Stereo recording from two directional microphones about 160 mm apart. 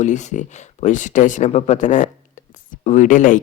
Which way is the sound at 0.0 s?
50° left (ahead or behind).